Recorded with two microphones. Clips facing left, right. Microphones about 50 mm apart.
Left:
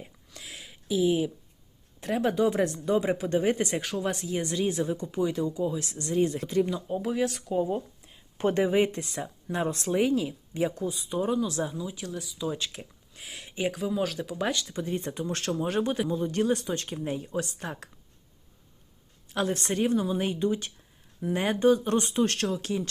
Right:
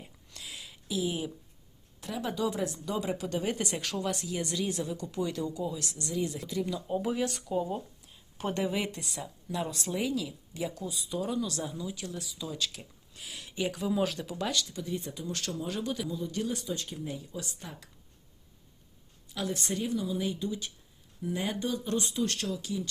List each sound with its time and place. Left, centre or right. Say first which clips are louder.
0.3 s a sound: left 1 dB; left
2.0 s a man's voice: left 7 dB; left
3.8 s speech: left 4 dB; centre
4.0 s speech: left 3 dB; left
6.9 s speech: left 2 dB; centre
7.5 s speech: left 4 dB; centre
8.5 s a man's voice: left 7 dB; left
12.1 s speech: left 5 dB; centre
12.5 s speech: left 4 dB; left
13.7 s speech: left 1 dB; centre
14.4 s a man's voice: left 3 dB; left
19.3 s speech: left 5 dB; left